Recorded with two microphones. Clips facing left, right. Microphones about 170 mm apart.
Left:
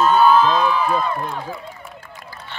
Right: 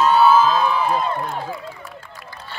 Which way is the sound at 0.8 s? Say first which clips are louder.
Even; 25° right (ahead or behind).